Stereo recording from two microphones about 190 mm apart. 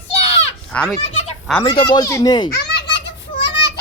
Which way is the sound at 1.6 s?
25° left (ahead or behind).